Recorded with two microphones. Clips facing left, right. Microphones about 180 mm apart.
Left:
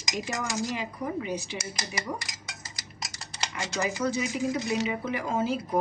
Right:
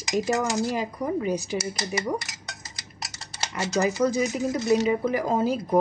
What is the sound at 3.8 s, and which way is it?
Speech, 40° right (ahead or behind).